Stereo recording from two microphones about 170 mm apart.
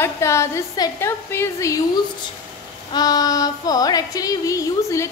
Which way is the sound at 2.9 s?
25° left (ahead or behind).